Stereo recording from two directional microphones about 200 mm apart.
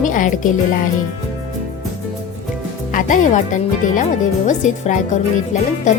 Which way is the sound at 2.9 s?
40° left (ahead or behind).